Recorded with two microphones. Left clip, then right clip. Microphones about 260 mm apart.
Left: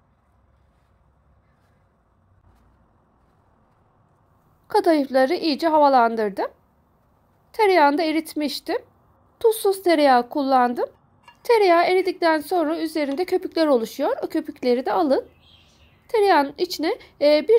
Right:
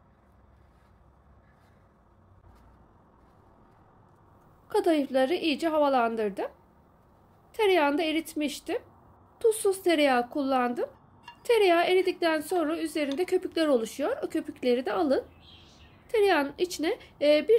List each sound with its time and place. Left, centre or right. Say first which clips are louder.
4.6 s a woman's voice: left 7 dB; left
7.5 s a woman's voice: left 7 dB; left